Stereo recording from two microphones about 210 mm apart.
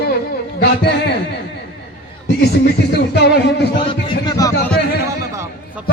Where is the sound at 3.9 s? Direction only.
20° left (ahead or behind).